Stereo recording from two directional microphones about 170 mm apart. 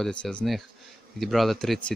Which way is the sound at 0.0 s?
5° left (ahead or behind).